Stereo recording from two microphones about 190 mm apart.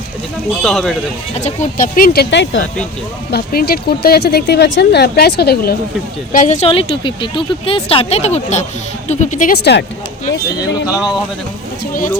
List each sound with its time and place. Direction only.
0.6 s speech: centre (ahead or behind)
1.4 s speech: 40° left (ahead or behind)
2.3 s speech: 70° left (ahead or behind)
3.3 s speech: 55° left (ahead or behind)
6.3 s speech: 40° left (ahead or behind)
9.7 s speech: 60° left (ahead or behind)